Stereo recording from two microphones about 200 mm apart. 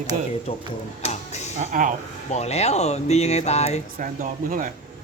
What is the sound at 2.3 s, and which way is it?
Speech, 30° left (ahead or behind).